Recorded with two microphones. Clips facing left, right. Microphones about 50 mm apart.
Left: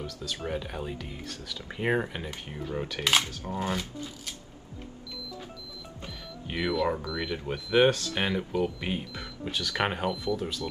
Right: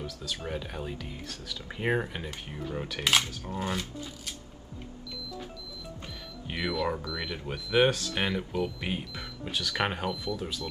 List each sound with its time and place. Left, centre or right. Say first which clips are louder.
0.0 s speech: left 1 dB; centre
6.4 s speech: left 3 dB; centre